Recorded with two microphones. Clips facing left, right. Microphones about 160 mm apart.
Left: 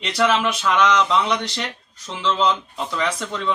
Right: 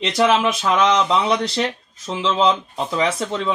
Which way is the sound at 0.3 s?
30° right (ahead or behind).